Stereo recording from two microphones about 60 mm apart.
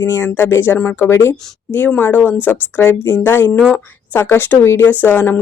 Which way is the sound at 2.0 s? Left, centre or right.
Left.